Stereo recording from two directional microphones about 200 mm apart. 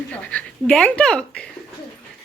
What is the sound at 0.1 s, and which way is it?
Speech, 5° left (ahead or behind).